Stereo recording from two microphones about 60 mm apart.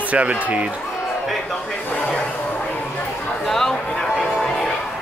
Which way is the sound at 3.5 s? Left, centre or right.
Centre.